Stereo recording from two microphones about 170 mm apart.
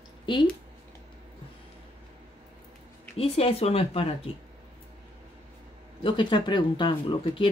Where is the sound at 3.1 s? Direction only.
35° left (ahead or behind).